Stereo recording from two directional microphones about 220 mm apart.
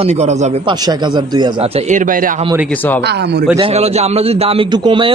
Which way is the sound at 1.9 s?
35° right (ahead or behind).